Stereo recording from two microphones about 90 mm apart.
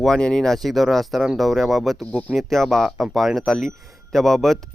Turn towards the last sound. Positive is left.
turn(degrees=5)  # may be behind; listen again after turning